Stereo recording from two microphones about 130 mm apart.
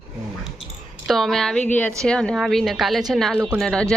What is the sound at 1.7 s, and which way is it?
A woman's voice, 10° left (ahead or behind).